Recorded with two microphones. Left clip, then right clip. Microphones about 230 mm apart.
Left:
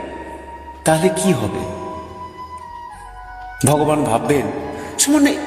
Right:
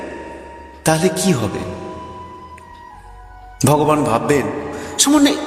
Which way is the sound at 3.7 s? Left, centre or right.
Centre.